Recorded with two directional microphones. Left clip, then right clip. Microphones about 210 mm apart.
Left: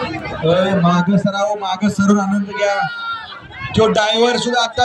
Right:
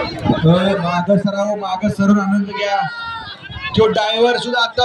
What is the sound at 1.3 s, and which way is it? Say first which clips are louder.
A man's voice: left 1 dB; 45° left (ahead or behind).